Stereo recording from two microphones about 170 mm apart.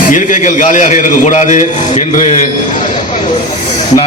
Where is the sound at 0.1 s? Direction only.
50° left (ahead or behind).